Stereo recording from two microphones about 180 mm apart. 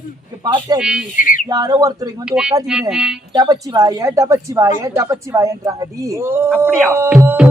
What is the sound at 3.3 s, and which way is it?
Speech, 20° right (ahead or behind).